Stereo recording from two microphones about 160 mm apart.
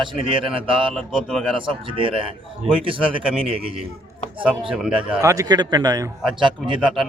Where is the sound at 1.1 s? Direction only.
Centre (ahead or behind).